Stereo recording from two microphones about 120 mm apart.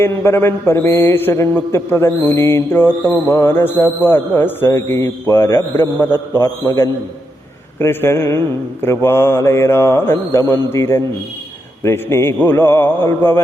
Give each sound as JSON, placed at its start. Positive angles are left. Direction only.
{"t": 0.0, "sound": "a man's voice", "side_deg": 20}